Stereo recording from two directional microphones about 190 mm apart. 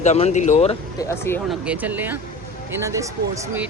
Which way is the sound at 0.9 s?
15° left (ahead or behind).